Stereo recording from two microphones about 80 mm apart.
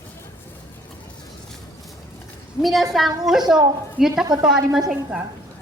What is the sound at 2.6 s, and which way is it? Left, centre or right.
A woman's voice, centre.